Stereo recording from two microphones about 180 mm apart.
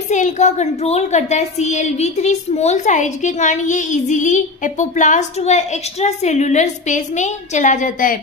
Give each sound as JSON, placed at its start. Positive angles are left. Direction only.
{"t": 0.1, "sound": "a woman's voice", "side_deg": 40}